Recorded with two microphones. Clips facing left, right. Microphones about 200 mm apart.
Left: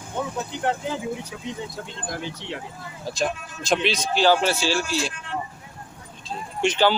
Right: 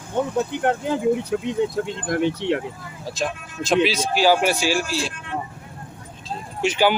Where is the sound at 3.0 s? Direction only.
Centre (ahead or behind).